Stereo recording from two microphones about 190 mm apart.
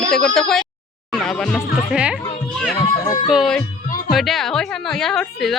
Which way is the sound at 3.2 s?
Centre (ahead or behind).